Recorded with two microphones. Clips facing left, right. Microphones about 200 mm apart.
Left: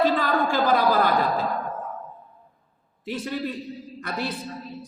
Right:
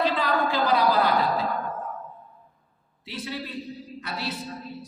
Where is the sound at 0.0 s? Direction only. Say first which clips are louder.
Left 3 dB; 45° left (ahead or behind).